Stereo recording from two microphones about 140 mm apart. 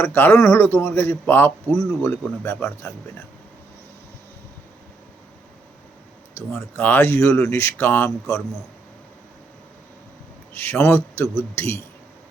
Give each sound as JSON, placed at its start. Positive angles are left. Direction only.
{"t": 0.0, "sound": "speech", "side_deg": 15}
{"t": 6.5, "sound": "speech", "side_deg": 10}
{"t": 10.5, "sound": "speech", "side_deg": 15}